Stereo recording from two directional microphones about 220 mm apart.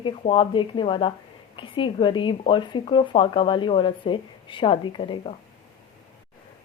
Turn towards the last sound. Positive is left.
turn(degrees=25)  # may be behind; listen again after turning